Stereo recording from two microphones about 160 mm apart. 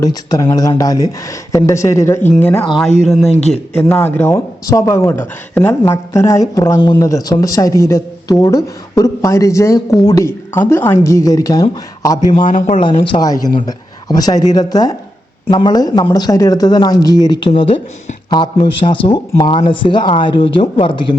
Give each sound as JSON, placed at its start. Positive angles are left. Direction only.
{"t": 0.0, "sound": "speech", "side_deg": 25}
{"t": 3.8, "sound": "speech", "side_deg": 15}
{"t": 12.4, "sound": "speech", "side_deg": 55}
{"t": 12.9, "sound": "a man's voice", "side_deg": 35}